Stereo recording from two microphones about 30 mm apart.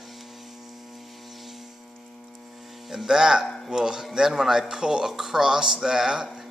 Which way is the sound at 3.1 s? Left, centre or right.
Centre.